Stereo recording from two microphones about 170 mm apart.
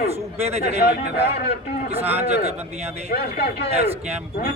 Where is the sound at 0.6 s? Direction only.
70° left (ahead or behind).